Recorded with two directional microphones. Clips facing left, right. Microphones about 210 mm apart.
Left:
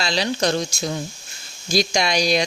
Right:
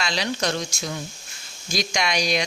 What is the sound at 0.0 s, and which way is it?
Speech, 35° left (ahead or behind).